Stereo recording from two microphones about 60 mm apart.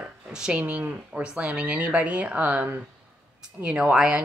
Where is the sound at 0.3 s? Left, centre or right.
Centre.